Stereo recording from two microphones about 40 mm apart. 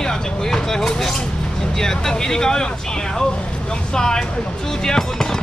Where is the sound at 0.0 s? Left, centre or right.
Centre.